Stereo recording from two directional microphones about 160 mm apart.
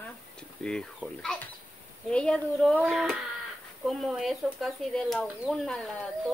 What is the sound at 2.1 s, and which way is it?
Speech, 5° left (ahead or behind).